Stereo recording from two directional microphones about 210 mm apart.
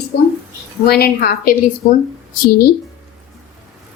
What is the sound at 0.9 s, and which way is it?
Speech, 45° left (ahead or behind).